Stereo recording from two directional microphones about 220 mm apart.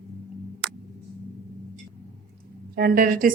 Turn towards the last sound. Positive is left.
turn(degrees=-40)  # may be behind; listen again after turning